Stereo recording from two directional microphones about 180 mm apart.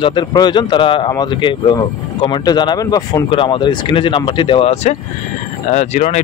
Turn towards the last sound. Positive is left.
turn(degrees=40)  # may be behind; listen again after turning